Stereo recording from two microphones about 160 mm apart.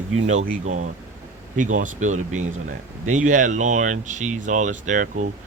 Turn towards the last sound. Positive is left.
turn(degrees=-50)  # may be behind; listen again after turning